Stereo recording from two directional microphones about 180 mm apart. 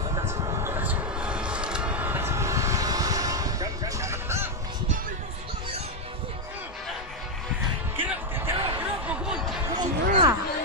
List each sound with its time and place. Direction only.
0.1 s music: 15° right (ahead or behind)
7.9 s music: 10° right (ahead or behind)
9.8 s a sound: 25° right (ahead or behind)